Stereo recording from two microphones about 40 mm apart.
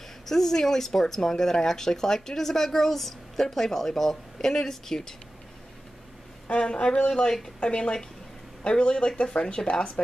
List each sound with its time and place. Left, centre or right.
0.3 s speech: centre
6.4 s speech: left